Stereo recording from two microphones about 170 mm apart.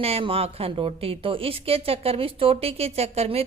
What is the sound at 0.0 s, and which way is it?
A woman's voice, 35° right (ahead or behind).